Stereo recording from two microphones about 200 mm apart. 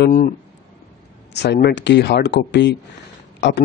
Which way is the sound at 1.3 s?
55° left (ahead or behind).